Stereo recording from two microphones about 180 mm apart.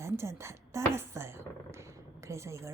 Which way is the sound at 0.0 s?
15° right (ahead or behind).